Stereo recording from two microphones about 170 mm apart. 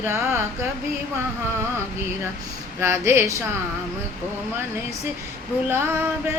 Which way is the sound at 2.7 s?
15° right (ahead or behind).